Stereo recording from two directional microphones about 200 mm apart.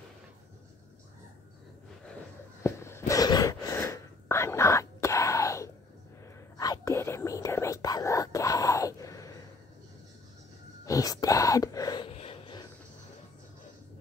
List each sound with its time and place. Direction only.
2.6 s gasp: 15° left (ahead or behind)
6.6 s whispering: 15° left (ahead or behind)
10.9 s whispering: 20° left (ahead or behind)